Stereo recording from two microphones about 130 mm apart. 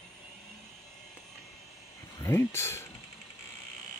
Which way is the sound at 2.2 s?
20° left (ahead or behind).